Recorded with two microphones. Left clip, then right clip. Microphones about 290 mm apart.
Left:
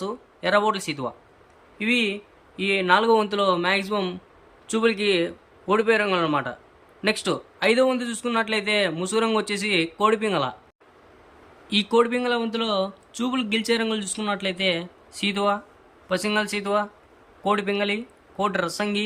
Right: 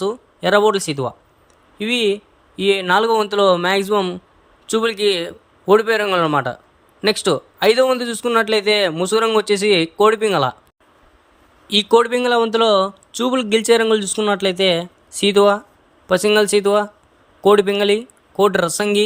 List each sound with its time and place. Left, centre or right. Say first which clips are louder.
0.0 s speech: right 7 dB; centre
11.7 s speech: right 7 dB; centre